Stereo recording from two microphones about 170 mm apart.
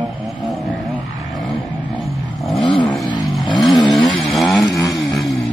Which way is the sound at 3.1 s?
25° left (ahead or behind).